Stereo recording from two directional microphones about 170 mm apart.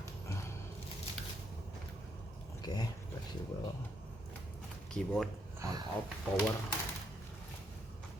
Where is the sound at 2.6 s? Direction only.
25° left (ahead or behind).